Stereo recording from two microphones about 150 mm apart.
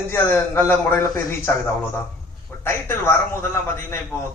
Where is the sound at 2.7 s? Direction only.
15° left (ahead or behind).